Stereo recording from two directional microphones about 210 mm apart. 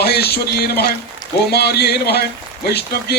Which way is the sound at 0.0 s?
50° left (ahead or behind).